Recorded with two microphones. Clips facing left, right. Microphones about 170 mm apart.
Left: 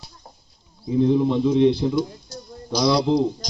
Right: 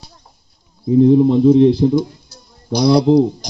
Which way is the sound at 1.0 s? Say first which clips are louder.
Right 8 dB; 40° right (ahead or behind).